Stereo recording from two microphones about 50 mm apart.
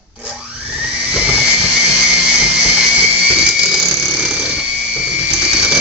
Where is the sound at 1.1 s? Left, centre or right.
Right.